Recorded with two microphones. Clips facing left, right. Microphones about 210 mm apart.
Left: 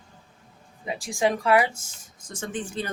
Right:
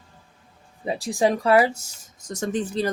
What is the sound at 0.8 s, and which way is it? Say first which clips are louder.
Speech: right 3 dB; 35° right (ahead or behind).